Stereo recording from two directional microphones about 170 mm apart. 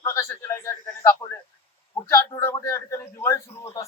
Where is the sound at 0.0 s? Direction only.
15° left (ahead or behind).